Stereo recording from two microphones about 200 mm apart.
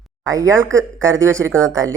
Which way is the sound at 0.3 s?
15° right (ahead or behind).